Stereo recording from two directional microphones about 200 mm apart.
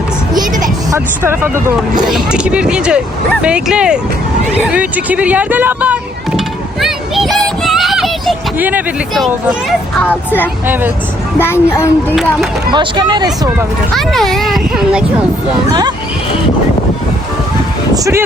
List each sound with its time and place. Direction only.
0.9 s a child's voice: 10° right (ahead or behind)
6.8 s music: centre (ahead or behind)
11.3 s a child's voice: 10° left (ahead or behind)
12.7 s speech: 20° right (ahead or behind)
13.9 s a child's voice: centre (ahead or behind)
17.9 s speech: 15° right (ahead or behind)